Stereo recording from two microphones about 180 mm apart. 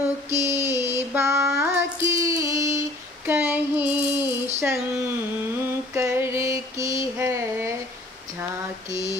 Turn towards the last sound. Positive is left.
turn(degrees=-15)  # may be behind; listen again after turning